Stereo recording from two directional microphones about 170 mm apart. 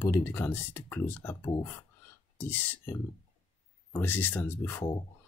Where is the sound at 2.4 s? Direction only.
10° left (ahead or behind).